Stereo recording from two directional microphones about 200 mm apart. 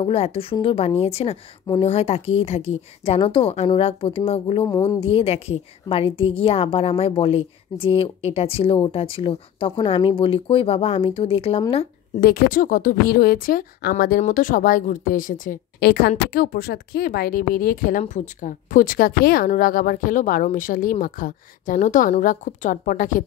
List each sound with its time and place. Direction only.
0.0 s a woman's voice: 30° left (ahead or behind)
4.6 s a woman's voice: 15° left (ahead or behind)
5.0 s a woman's voice: 30° left (ahead or behind)
12.2 s a woman's voice: 45° left (ahead or behind)